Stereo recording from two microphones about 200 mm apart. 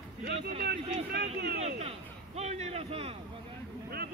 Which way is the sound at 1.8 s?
30° right (ahead or behind).